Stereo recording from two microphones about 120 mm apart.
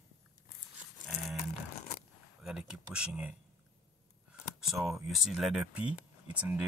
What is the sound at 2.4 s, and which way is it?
Speech, 5° right (ahead or behind).